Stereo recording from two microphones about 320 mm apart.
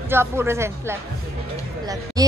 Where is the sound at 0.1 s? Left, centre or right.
Centre.